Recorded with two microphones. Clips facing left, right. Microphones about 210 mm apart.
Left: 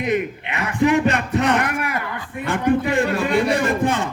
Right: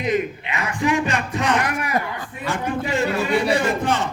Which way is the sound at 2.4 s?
55° left (ahead or behind).